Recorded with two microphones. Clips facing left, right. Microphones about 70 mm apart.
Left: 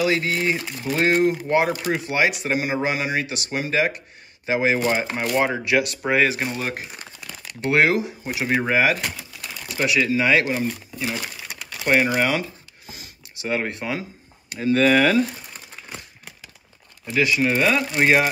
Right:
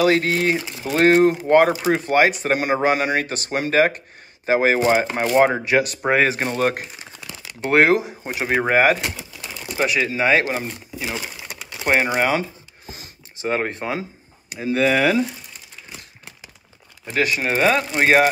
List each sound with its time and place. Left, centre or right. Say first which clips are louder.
0.0 s speech: right 4 dB; right
5.5 s speech: right 2 dB; right
6.9 s crumpling: right 1 dB; centre
7.7 s speech: right 3 dB; right
9.0 s pigeon: right 2 dB; centre
10.1 s speech: right 1 dB; right
11.0 s speech: right 2 dB; centre
11.4 s crumpling: right 1 dB; centre
11.8 s speech: even; right
12.2 s a sound: right 2 dB; right
14.5 s speech: left 1 dB; centre
17.1 s speech: left 1 dB; right